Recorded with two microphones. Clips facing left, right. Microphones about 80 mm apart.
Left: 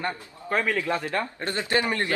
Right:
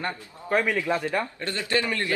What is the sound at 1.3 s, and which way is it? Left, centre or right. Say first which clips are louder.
Speech: left 1 dB; left.